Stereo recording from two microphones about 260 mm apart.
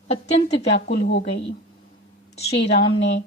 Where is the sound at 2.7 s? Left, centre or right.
Left.